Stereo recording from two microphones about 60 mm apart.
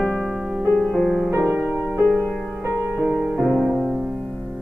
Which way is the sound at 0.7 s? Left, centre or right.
Centre.